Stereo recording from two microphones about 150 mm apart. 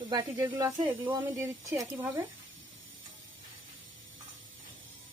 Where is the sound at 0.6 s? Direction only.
15° right (ahead or behind).